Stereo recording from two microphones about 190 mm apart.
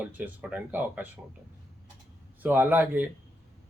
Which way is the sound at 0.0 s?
10° right (ahead or behind).